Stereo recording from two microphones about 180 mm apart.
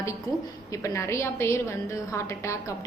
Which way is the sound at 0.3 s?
15° left (ahead or behind).